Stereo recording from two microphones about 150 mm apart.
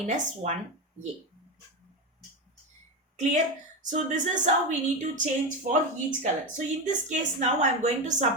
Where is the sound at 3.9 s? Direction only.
55° right (ahead or behind).